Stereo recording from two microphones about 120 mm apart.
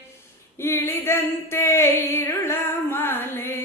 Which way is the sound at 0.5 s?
20° left (ahead or behind).